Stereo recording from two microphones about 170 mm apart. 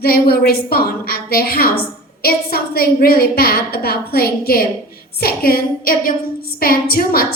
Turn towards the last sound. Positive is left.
turn(degrees=60)  # may be behind; listen again after turning